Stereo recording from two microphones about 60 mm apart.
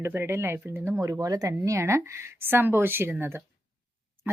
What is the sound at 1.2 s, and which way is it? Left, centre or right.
Speech, right.